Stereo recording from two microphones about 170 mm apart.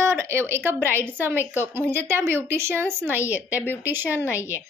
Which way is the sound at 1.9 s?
15° right (ahead or behind).